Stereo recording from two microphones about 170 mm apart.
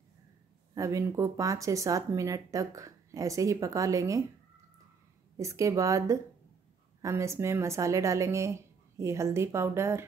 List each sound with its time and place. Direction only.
0.7 s speech: 20° right (ahead or behind)
5.4 s speech: 20° right (ahead or behind)